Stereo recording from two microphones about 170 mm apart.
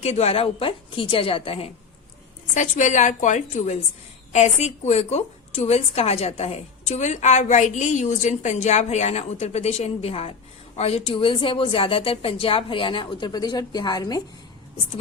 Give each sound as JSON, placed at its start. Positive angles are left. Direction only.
{"t": 0.0, "sound": "a woman's voice", "side_deg": 40}
{"t": 2.6, "sound": "a woman's voice", "side_deg": 45}